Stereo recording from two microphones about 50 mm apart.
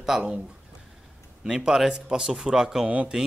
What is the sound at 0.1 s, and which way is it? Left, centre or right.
Speech, centre.